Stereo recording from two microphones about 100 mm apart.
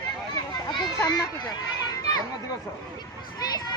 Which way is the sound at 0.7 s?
45° left (ahead or behind).